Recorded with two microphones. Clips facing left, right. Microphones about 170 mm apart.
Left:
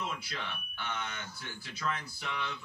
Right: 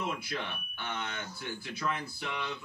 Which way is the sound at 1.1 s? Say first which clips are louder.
Right 5 dB; 55° right (ahead or behind).